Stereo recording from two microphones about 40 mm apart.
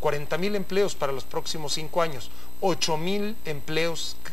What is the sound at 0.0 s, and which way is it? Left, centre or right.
Speech, centre.